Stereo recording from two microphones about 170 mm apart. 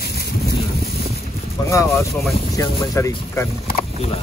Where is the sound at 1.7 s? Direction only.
15° left (ahead or behind).